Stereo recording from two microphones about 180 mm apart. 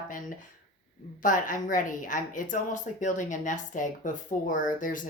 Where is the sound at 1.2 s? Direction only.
45° left (ahead or behind).